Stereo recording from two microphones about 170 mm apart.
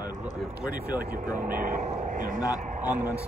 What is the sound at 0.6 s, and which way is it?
Speech, 5° right (ahead or behind).